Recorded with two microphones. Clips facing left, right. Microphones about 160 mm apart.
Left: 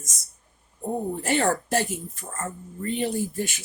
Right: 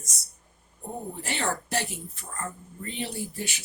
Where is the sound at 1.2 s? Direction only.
45° left (ahead or behind).